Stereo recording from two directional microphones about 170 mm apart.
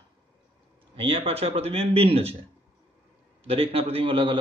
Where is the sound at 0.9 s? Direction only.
35° right (ahead or behind).